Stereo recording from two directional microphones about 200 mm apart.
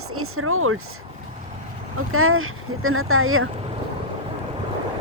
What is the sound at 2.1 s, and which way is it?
Speech, 90° right.